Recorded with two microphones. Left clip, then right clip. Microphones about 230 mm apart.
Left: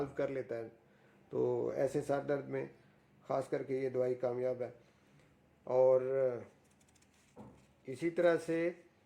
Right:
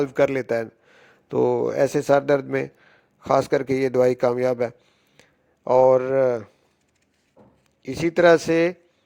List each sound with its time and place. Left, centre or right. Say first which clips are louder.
0.0 s a man's voice: right 17 dB; right
7.8 s a man's voice: right 14 dB; right